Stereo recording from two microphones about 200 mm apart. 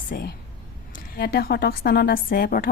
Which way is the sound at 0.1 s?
50° left (ahead or behind).